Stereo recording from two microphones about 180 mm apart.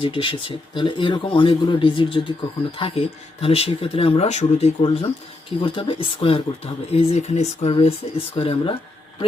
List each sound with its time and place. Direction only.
0.0 s speech: 30° left (ahead or behind)